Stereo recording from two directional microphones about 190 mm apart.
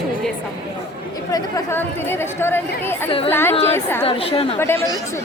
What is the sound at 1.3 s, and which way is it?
Speech, 20° left (ahead or behind).